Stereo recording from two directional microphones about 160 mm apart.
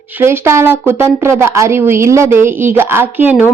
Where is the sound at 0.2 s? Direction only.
15° right (ahead or behind).